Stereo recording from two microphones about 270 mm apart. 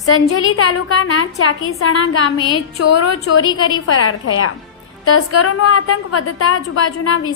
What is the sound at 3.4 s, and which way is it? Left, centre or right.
Speech, centre.